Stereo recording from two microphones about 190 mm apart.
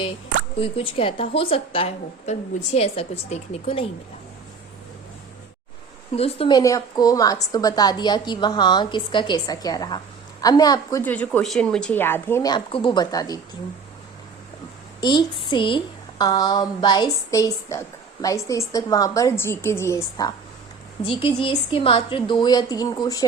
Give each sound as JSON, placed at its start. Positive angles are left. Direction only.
{"t": 0.6, "sound": "a woman's voice", "side_deg": 30}
{"t": 6.1, "sound": "a woman's voice", "side_deg": 30}
{"t": 6.6, "sound": "a woman's voice", "side_deg": 15}
{"t": 11.0, "sound": "speech", "side_deg": 10}
{"t": 15.0, "sound": "a woman's voice", "side_deg": 25}